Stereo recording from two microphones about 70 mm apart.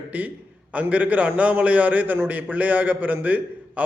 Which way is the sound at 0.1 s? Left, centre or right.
Right.